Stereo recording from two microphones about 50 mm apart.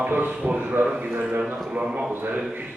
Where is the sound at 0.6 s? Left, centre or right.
Right.